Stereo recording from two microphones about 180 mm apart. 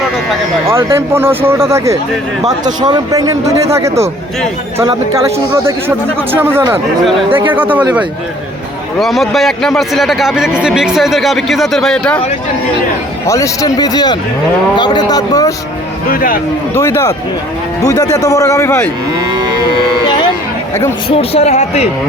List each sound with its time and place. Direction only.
0.7 s a man's voice: 15° right (ahead or behind)
6.3 s speech: 10° right (ahead or behind)
9.0 s a man's voice: centre (ahead or behind)
13.2 s a man's voice: 15° left (ahead or behind)
16.0 s speech: 50° left (ahead or behind)
16.7 s a man's voice: 15° left (ahead or behind)
21.2 s speech: 35° left (ahead or behind)